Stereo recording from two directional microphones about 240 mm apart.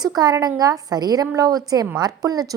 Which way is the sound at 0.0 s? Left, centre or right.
Centre.